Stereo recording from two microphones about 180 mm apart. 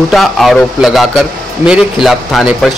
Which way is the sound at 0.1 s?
Centre (ahead or behind).